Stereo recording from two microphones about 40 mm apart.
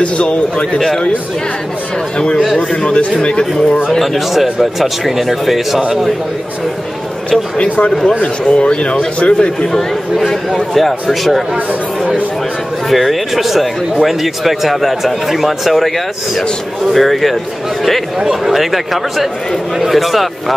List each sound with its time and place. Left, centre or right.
0.0 s speech: left
0.7 s speech: centre
2.1 s speech: left
4.0 s a man's voice: centre
7.2 s speech: left
10.1 s a man's voice: centre
12.9 s a man's voice: centre
18.2 s a man's voice: centre